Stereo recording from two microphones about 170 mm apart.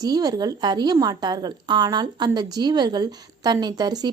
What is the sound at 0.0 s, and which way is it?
Speech, 20° right (ahead or behind).